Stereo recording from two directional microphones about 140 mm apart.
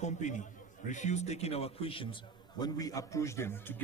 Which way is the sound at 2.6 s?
25° left (ahead or behind).